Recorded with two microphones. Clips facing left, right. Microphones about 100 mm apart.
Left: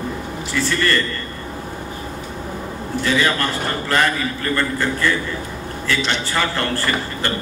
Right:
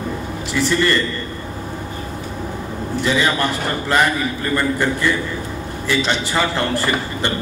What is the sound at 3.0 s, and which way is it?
A man's voice, 20° right (ahead or behind).